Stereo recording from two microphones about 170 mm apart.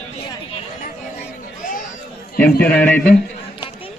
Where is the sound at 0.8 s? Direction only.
50° left (ahead or behind).